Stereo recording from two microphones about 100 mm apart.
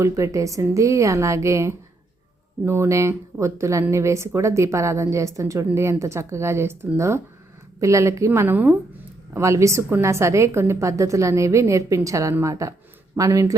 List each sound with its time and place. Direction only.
0.0 s speech: 30° right (ahead or behind)
9.3 s speech: 30° right (ahead or behind)